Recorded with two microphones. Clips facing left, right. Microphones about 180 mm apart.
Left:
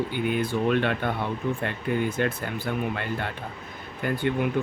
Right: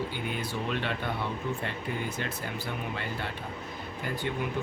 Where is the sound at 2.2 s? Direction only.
55° left (ahead or behind).